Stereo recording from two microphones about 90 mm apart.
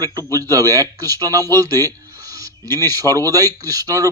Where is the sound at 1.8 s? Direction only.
40° right (ahead or behind).